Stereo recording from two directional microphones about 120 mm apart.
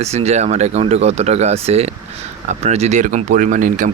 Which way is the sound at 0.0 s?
65° right (ahead or behind).